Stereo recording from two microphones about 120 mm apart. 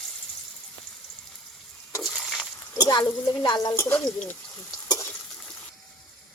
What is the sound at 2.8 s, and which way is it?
Speech, 35° left (ahead or behind).